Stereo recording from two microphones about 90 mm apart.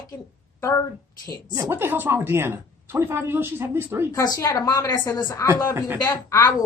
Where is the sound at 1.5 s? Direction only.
35° right (ahead or behind).